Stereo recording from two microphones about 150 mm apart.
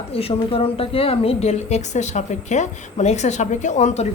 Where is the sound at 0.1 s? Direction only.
40° left (ahead or behind).